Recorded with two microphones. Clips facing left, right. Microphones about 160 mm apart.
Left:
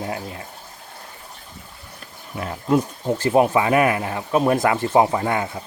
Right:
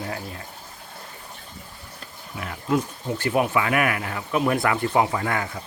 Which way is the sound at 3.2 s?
30° left (ahead or behind).